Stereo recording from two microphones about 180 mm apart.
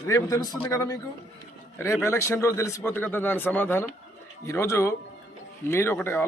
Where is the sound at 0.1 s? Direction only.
20° left (ahead or behind).